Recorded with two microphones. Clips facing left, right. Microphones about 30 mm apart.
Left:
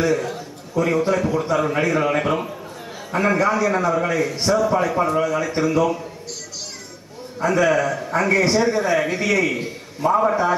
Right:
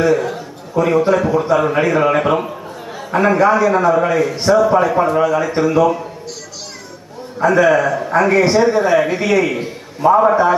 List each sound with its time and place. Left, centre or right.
0.0 s a man's voice: centre
7.3 s a man's voice: centre